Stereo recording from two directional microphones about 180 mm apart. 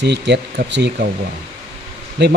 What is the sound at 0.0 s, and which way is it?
Speech, 70° right (ahead or behind).